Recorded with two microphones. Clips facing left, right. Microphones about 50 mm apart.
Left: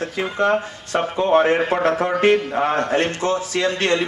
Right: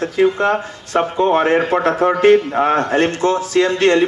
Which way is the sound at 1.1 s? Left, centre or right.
Right.